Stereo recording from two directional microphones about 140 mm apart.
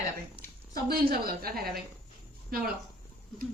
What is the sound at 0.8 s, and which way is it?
A woman's voice, 90° right.